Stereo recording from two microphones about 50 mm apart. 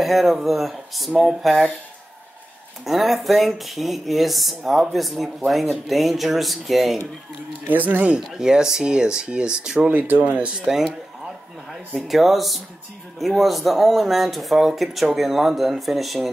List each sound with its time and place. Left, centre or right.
0.0 s speech: centre
2.8 s speech: centre
7.6 s speech: right
8.4 s speech: centre
9.8 s speech: right
12.1 s speech: centre